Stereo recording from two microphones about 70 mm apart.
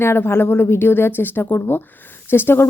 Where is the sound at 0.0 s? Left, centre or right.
Left.